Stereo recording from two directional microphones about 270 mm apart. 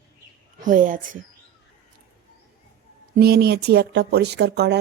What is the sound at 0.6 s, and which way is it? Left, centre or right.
Speech, right.